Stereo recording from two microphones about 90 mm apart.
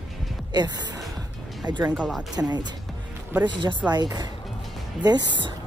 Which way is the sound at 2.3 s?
50° right (ahead or behind).